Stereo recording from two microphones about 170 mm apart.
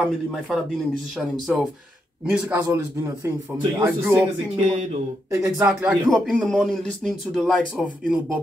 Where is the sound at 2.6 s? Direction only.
15° right (ahead or behind).